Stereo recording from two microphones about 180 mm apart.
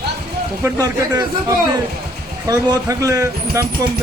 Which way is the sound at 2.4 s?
20° right (ahead or behind).